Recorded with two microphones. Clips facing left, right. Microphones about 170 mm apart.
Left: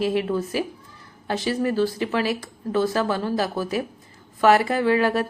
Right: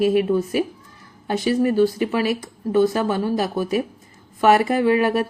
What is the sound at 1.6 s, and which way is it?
A woman's voice, 15° right (ahead or behind).